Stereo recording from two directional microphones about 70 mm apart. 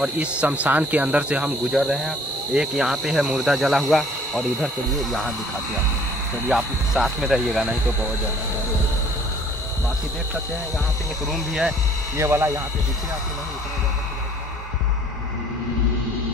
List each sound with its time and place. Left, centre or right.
0.0 s speech: centre
1.7 s speech: centre
6.5 s speech: centre
11.3 s speech: centre
12.2 s speech: right